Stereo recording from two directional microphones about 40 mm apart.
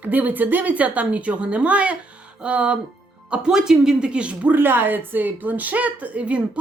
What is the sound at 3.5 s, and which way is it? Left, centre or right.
Speech, centre.